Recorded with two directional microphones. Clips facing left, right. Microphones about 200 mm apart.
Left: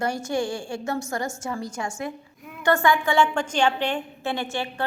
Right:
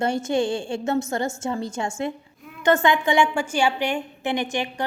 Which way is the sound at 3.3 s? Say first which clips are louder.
Even; 10° right (ahead or behind).